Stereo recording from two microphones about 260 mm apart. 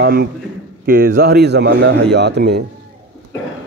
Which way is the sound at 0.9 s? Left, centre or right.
Right.